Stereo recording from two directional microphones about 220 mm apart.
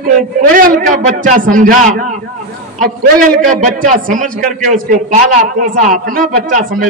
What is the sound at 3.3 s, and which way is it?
A man's voice, 40° right (ahead or behind).